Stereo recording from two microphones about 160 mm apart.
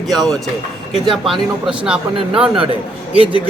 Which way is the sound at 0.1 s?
Centre (ahead or behind).